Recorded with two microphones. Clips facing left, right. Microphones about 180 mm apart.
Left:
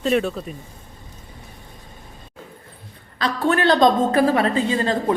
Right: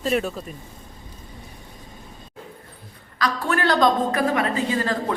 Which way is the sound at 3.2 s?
25° left (ahead or behind).